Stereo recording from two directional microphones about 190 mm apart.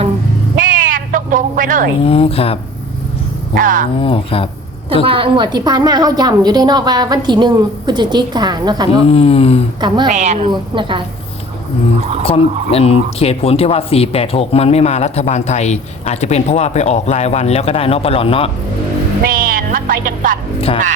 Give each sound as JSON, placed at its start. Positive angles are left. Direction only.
{"t": 0.6, "sound": "a sound", "side_deg": -45}
{"t": 2.0, "sound": "speech", "side_deg": 30}
{"t": 3.6, "sound": "speech", "side_deg": -45}
{"t": 4.0, "sound": "speech", "side_deg": 30}
{"t": 5.0, "sound": "a woman's voice", "side_deg": -25}
{"t": 8.9, "sound": "speech", "side_deg": 30}
{"t": 9.8, "sound": "a woman's voice", "side_deg": -25}
{"t": 10.1, "sound": "a woman's voice", "side_deg": -35}
{"t": 10.5, "sound": "a woman's voice", "side_deg": -25}
{"t": 12.2, "sound": "speech", "side_deg": 30}
{"t": 19.3, "sound": "music", "side_deg": -50}